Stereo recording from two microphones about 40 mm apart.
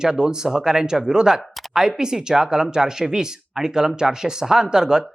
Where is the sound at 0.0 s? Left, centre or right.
Centre.